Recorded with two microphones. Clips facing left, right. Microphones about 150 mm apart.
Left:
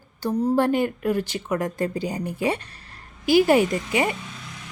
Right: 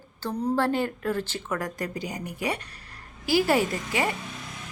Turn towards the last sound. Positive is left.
turn(degrees=20)  # may be behind; listen again after turning